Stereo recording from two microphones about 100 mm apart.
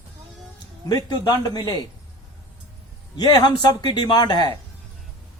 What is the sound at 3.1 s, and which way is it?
Speech, 45° left (ahead or behind).